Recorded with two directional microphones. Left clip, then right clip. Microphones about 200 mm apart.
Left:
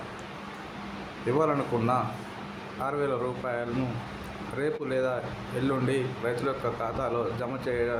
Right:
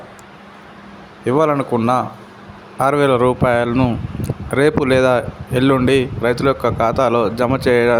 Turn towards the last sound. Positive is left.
turn(degrees=-55)  # may be behind; listen again after turning